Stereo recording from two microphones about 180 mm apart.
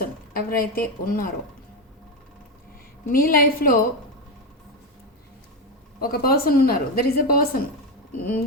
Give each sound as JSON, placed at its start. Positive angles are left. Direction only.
{"t": 0.0, "sound": "a woman's voice", "side_deg": 55}
{"t": 3.1, "sound": "a woman's voice", "side_deg": 55}
{"t": 6.0, "sound": "a woman's voice", "side_deg": 55}